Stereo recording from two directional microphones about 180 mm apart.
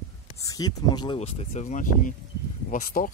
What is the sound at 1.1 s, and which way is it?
Speech, 35° left (ahead or behind).